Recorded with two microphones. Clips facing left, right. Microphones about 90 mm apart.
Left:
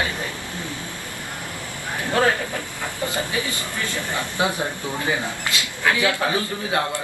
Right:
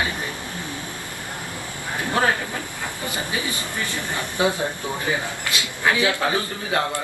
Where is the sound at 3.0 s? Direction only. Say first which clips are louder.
Left 3 dB; 20° right (ahead or behind).